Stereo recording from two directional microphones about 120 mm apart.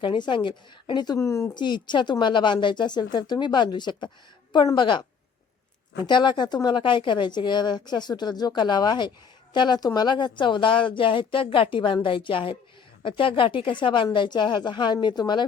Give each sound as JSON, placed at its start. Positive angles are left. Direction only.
{"t": 0.0, "sound": "a woman's voice", "side_deg": 45}
{"t": 1.2, "sound": "speech", "side_deg": 25}
{"t": 1.5, "sound": "a woman's voice", "side_deg": 40}